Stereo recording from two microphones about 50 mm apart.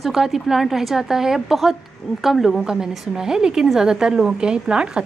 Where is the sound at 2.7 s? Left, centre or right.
Centre.